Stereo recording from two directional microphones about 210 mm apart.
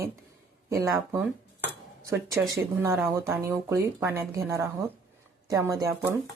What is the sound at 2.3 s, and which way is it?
Speech, 15° right (ahead or behind).